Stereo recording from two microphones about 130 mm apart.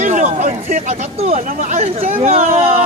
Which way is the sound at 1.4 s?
70° right (ahead or behind).